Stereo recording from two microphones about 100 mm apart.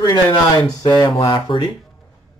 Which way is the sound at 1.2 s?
50° left (ahead or behind).